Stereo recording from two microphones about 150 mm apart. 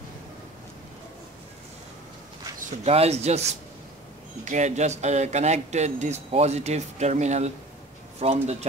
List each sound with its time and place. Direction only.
2.8 s a man's voice: 45° right (ahead or behind)
4.5 s a man's voice: 50° right (ahead or behind)